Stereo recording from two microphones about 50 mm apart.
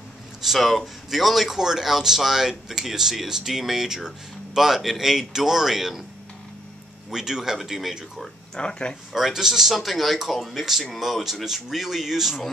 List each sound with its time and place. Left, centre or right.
0.4 s a man's voice: centre
7.1 s a man's voice: centre
8.5 s speech: centre
9.1 s a man's voice: centre